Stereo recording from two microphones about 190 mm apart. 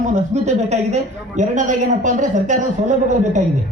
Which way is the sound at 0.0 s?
40° right (ahead or behind).